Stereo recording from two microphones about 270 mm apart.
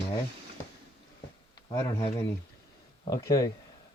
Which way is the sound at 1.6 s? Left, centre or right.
Centre.